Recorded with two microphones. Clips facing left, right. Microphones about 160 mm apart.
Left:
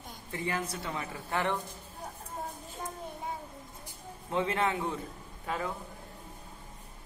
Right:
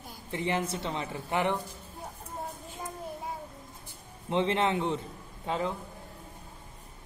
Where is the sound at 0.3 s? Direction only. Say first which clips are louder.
Right 4 dB; 25° right (ahead or behind).